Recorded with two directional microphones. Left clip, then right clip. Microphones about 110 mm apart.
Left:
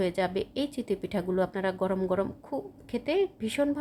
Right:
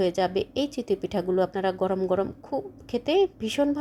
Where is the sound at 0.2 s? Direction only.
15° right (ahead or behind).